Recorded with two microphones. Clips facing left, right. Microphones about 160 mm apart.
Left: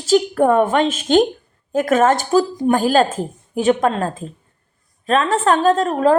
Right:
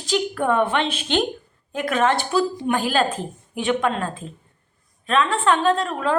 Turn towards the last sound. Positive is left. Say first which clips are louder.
# left 6 dB
turn(degrees=40)  # may be behind; listen again after turning